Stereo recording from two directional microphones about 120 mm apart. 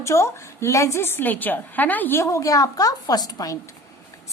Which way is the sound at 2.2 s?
30° left (ahead or behind).